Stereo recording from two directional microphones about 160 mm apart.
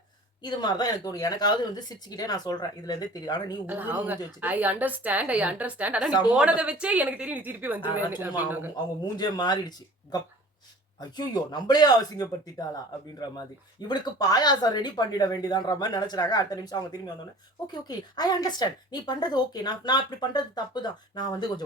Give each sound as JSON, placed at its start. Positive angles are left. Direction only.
{"t": 0.4, "sound": "speech", "side_deg": 25}
{"t": 3.7, "sound": "a woman's voice", "side_deg": -10}
{"t": 6.1, "sound": "speech", "side_deg": 25}
{"t": 6.3, "sound": "a woman's voice", "side_deg": -5}
{"t": 8.7, "sound": "speech", "side_deg": 25}
{"t": 13.8, "sound": "speech", "side_deg": 25}